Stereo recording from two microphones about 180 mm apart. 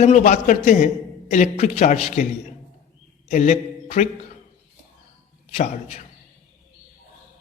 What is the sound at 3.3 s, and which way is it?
Speech, 40° left (ahead or behind).